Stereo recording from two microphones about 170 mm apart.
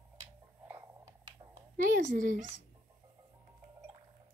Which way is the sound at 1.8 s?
50° right (ahead or behind).